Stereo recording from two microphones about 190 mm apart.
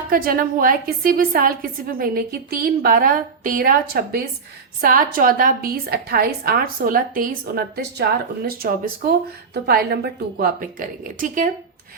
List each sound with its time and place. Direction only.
0.1 s a woman's voice: 50° right (ahead or behind)